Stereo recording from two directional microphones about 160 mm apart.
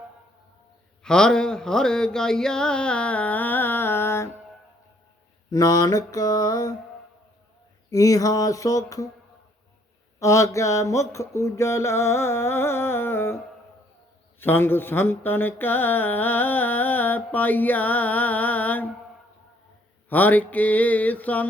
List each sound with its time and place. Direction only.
1.0 s a sound: 5° left (ahead or behind)
5.5 s mantra: 25° left (ahead or behind)
7.9 s mantra: 20° left (ahead or behind)
10.2 s mantra: 20° left (ahead or behind)
20.1 s mantra: 10° left (ahead or behind)